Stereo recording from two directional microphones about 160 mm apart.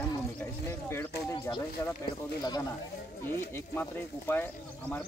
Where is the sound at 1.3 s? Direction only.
20° left (ahead or behind).